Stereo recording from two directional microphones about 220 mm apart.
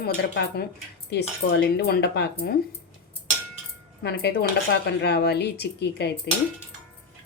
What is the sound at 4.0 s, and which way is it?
Speech, 45° left (ahead or behind).